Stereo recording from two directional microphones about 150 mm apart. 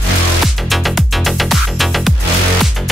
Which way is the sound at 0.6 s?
Centre (ahead or behind).